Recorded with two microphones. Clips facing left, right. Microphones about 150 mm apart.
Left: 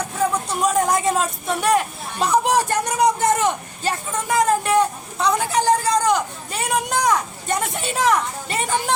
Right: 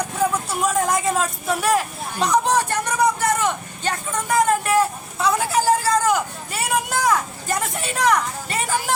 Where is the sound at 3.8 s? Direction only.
Centre (ahead or behind).